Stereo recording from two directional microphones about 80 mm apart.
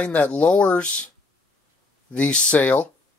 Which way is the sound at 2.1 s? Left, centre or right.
Centre.